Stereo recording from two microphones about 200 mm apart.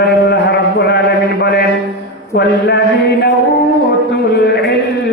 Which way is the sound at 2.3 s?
55° left (ahead or behind).